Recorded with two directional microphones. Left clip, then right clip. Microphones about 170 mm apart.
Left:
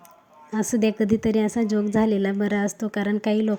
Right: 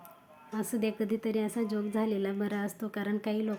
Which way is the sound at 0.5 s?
35° left (ahead or behind).